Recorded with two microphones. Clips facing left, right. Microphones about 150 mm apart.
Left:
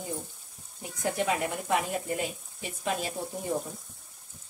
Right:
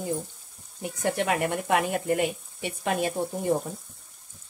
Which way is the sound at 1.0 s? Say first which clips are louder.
Right 3 dB; 75° right (ahead or behind).